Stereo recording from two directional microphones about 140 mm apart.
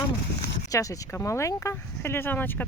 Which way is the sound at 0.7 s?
25° left (ahead or behind).